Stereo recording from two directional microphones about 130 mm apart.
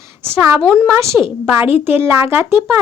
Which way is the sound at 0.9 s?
20° right (ahead or behind).